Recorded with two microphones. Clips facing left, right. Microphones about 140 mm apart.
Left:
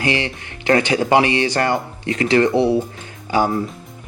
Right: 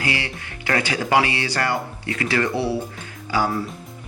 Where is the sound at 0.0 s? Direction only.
20° left (ahead or behind).